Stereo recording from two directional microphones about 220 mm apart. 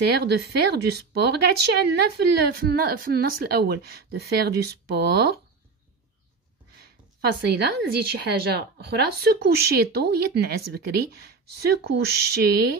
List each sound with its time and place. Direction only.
0.0 s speech: 45° right (ahead or behind)
7.2 s speech: 45° right (ahead or behind)